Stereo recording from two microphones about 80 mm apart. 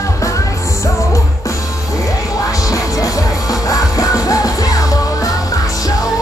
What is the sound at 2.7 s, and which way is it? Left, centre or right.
Music, left.